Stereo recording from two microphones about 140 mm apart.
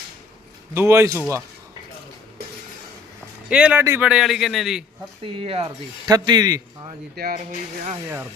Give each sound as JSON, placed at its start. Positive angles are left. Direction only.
{"t": 0.7, "sound": "a man's voice", "side_deg": -15}
{"t": 3.5, "sound": "a man's voice", "side_deg": -10}
{"t": 5.2, "sound": "speech", "side_deg": -40}
{"t": 6.1, "sound": "a man's voice", "side_deg": -30}
{"t": 7.2, "sound": "speech", "side_deg": -90}